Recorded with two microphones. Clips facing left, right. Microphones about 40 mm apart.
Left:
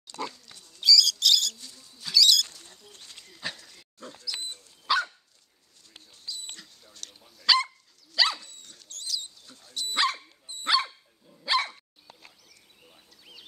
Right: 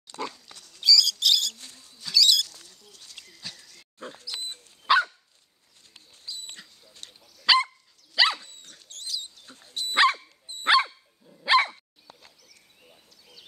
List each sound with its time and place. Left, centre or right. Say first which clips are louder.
0.7 s bird: even; centre
1.6 s rodents: right 1 dB; right
2.0 s rodents: even; centre
2.4 s rodents: left 1 dB; left
3.3 s a sound: left 8 dB; left
4.0 s a sound: right 1 dB; right
4.9 s dog: right 5 dB; right
6.2 s dog: even; right
8.3 s dog: right 3 dB; right
8.7 s rodents: even; right
9.5 s dog: right 2 dB; right